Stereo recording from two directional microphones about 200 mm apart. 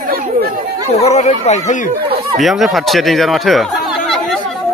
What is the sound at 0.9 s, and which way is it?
Speech, 35° left (ahead or behind).